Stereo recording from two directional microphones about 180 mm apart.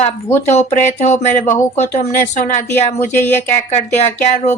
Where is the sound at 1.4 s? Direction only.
15° left (ahead or behind).